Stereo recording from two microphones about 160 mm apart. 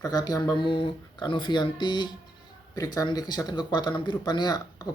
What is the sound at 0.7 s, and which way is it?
Speech, 35° left (ahead or behind).